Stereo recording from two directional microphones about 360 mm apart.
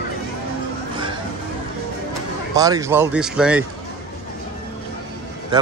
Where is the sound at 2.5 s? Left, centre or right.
Centre.